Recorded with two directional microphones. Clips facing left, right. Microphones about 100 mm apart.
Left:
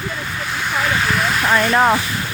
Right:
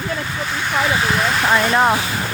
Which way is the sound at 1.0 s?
Centre (ahead or behind).